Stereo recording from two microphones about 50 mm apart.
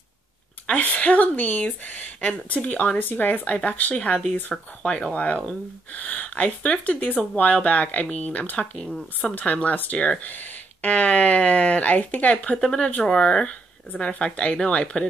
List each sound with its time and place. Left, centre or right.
0.7 s speech: left
10.2 s speech: left
12.5 s speech: centre